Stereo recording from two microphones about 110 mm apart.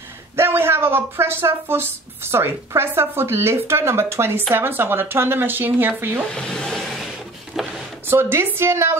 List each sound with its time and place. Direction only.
0.4 s speech: 20° right (ahead or behind)
6.3 s speech: 5° left (ahead or behind)
7.5 s a sound: 5° right (ahead or behind)
8.1 s speech: 20° right (ahead or behind)